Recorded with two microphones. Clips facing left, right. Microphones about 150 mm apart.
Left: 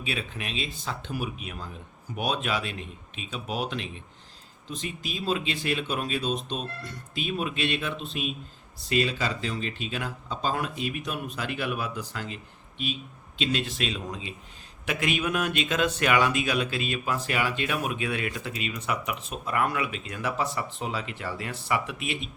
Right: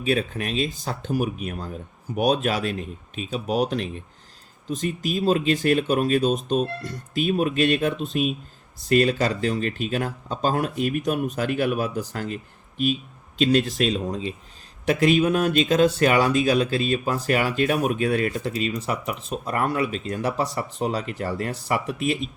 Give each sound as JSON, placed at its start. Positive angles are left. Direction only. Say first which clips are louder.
{"t": 0.0, "sound": "speech", "louder": "right 10 dB", "side_deg": -45}